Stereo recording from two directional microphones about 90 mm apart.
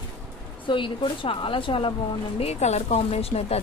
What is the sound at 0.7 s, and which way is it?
A woman's voice, 70° left (ahead or behind).